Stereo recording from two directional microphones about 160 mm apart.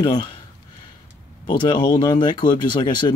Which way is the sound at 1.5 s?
30° left (ahead or behind).